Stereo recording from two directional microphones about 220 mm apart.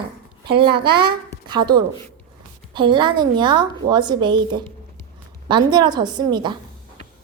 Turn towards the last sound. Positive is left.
turn(degrees=-20)  # may be behind; listen again after turning